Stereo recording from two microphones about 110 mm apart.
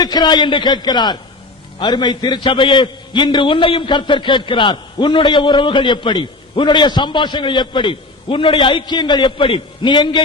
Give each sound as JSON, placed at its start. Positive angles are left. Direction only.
{"t": 0.0, "sound": "a man's voice", "side_deg": 40}